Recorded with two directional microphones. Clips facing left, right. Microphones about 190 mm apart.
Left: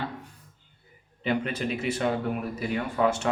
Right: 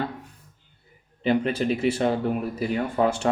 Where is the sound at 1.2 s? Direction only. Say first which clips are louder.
Right 5 dB; 30° right (ahead or behind).